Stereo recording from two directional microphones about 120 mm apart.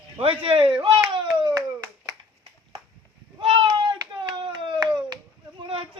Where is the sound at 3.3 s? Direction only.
40° right (ahead or behind).